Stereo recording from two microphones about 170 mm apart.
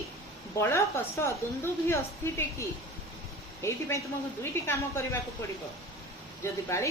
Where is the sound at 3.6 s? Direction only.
15° left (ahead or behind).